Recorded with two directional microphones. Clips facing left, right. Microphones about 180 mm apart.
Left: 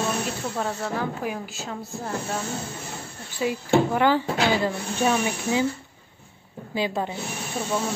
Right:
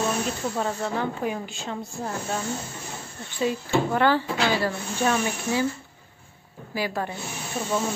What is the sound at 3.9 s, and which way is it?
Speech, 15° left (ahead or behind).